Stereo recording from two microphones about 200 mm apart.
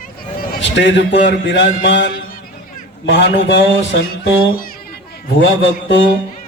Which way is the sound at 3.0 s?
60° left (ahead or behind).